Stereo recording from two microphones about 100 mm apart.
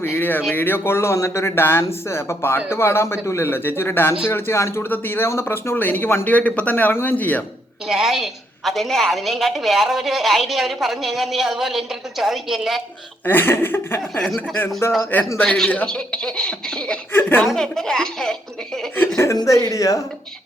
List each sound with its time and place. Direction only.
0.0 s speech: 20° left (ahead or behind)
7.9 s a woman's voice: 5° right (ahead or behind)
13.2 s speech: 20° left (ahead or behind)
14.0 s a woman's voice: centre (ahead or behind)
14.8 s speech: 25° left (ahead or behind)
15.4 s a woman's voice: 5° left (ahead or behind)
17.1 s speech: 20° left (ahead or behind)
17.4 s a woman's voice: 5° left (ahead or behind)
18.9 s a woman's voice: 25° left (ahead or behind)